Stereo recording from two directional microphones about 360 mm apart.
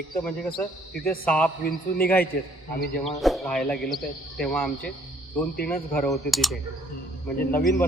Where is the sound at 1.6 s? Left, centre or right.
Left.